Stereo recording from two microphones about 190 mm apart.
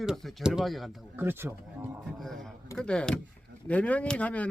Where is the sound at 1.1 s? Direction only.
10° right (ahead or behind).